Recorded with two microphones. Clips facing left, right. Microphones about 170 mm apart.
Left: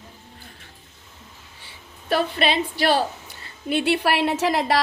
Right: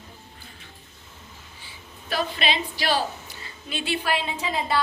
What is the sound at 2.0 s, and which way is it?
A woman's voice, 60° left (ahead or behind).